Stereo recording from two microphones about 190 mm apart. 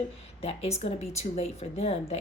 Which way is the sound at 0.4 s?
30° left (ahead or behind).